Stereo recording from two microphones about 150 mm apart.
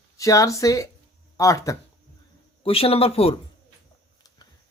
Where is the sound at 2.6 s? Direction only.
40° left (ahead or behind).